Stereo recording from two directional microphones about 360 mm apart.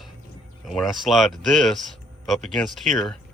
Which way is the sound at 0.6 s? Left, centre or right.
Centre.